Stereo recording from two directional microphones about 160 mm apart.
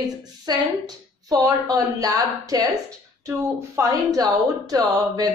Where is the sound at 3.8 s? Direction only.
20° right (ahead or behind).